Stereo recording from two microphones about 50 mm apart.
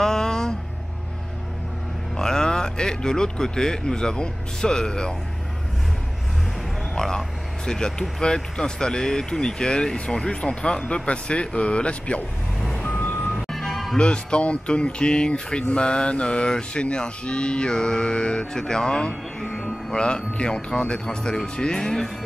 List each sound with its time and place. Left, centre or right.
0.0 s a sound: centre
2.1 s speech: centre
7.0 s speech: centre
12.7 s reversing beeps: left
13.5 s music: centre
13.9 s speech: centre